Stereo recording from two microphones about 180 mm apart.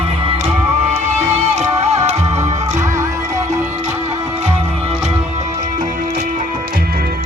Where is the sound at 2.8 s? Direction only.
15° right (ahead or behind).